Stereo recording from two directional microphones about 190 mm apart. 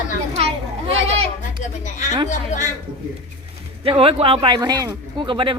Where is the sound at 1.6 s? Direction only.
40° left (ahead or behind).